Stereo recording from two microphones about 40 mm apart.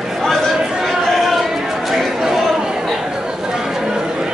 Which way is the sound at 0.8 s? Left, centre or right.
Centre.